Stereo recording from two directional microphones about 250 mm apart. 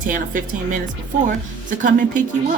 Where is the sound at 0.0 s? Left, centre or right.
Right.